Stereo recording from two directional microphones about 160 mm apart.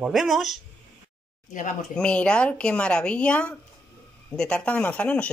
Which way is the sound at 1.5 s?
55° left (ahead or behind).